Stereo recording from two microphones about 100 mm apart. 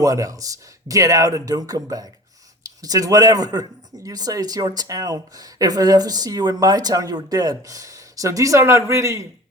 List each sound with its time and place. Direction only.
0.0 s speech: 35° right (ahead or behind)